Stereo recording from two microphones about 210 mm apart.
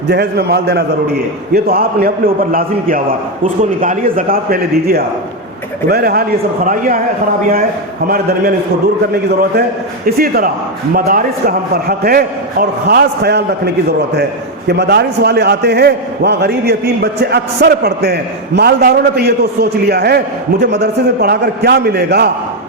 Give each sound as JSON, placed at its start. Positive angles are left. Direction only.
{"t": 0.1, "sound": "a man's voice", "side_deg": -50}
{"t": 8.0, "sound": "a man's voice", "side_deg": -45}
{"t": 10.1, "sound": "a man's voice", "side_deg": -45}
{"t": 14.7, "sound": "a man's voice", "side_deg": -50}